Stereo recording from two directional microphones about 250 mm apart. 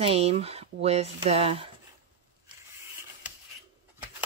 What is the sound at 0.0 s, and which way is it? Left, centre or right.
Speech, right.